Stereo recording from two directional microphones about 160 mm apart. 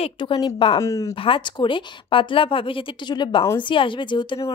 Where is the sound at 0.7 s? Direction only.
20° left (ahead or behind).